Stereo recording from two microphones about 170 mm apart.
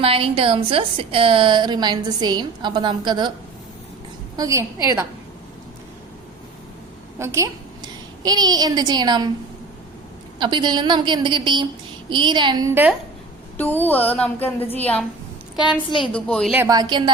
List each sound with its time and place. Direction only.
0.0 s a woman's voice: 35° right (ahead or behind)
4.4 s a woman's voice: 20° right (ahead or behind)
7.2 s a woman's voice: 15° right (ahead or behind)
10.4 s a woman's voice: 25° right (ahead or behind)
12.7 s a woman's voice: 10° right (ahead or behind)
13.6 s music: 10° left (ahead or behind)
16.1 s a woman's voice: 5° left (ahead or behind)
16.6 s a woman's voice: 25° right (ahead or behind)